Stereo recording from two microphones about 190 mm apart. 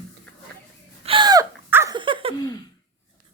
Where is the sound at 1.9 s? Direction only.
25° right (ahead or behind).